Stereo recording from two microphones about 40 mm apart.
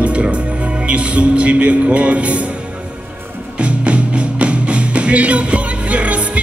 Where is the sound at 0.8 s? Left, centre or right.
Right.